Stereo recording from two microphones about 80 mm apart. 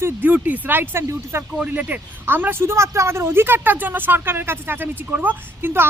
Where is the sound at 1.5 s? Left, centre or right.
Centre.